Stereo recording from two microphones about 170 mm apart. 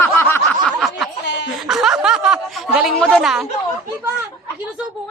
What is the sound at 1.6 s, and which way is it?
A woman's voice, 5° right (ahead or behind).